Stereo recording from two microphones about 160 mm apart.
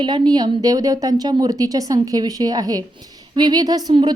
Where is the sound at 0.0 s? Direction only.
30° right (ahead or behind).